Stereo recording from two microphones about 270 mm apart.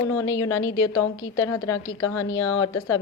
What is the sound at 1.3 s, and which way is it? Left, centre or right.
A woman's voice, centre.